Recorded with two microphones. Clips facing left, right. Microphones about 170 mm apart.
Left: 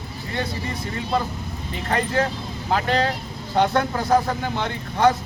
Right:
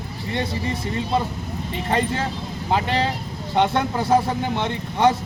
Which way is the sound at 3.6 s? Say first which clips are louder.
Even; 20° right (ahead or behind).